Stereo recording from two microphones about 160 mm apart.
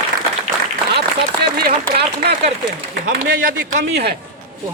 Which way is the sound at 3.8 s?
90° right.